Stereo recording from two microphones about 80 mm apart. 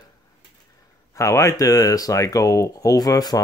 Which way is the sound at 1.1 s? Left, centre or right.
Left.